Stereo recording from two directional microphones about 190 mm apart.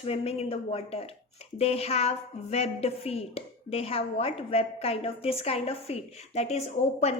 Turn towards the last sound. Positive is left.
turn(degrees=35)  # may be behind; listen again after turning